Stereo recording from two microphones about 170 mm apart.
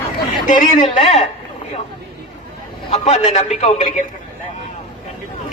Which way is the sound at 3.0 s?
40° left (ahead or behind).